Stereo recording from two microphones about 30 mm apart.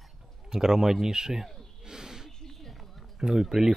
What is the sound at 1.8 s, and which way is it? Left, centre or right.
Snake, centre.